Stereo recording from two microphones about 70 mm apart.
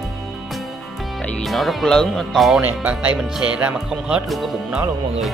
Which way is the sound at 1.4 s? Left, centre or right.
Centre.